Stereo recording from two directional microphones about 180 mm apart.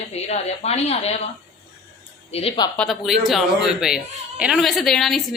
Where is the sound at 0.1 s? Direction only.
35° left (ahead or behind).